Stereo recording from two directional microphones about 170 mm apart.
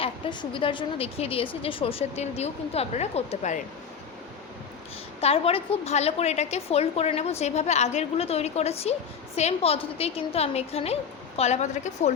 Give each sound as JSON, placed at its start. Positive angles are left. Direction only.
{"t": 0.0, "sound": "a woman's voice", "side_deg": 30}
{"t": 5.2, "sound": "a woman's voice", "side_deg": 35}